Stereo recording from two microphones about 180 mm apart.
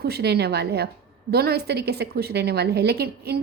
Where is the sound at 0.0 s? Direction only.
65° right (ahead or behind).